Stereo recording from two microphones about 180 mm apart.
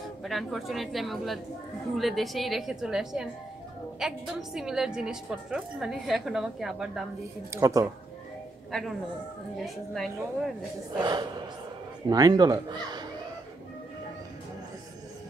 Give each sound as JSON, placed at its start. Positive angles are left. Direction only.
{"t": 0.2, "sound": "a woman's voice", "side_deg": 0}
{"t": 7.5, "sound": "speech", "side_deg": -15}
{"t": 8.7, "sound": "a woman's voice", "side_deg": 0}
{"t": 11.0, "sound": "speech", "side_deg": -25}